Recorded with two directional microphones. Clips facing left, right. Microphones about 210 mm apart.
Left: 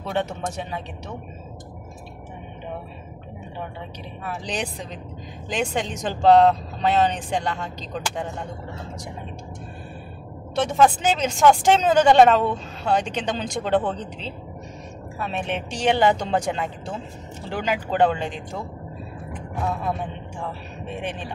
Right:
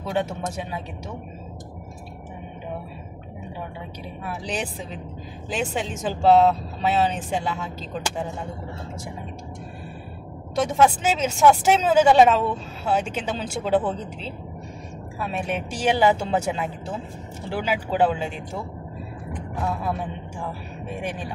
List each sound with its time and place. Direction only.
0.1 s speech: 10° right (ahead or behind)
4.5 s speech: 5° right (ahead or behind)
10.8 s speech: 5° right (ahead or behind)
15.3 s speech: 10° right (ahead or behind)
20.8 s speech: 10° right (ahead or behind)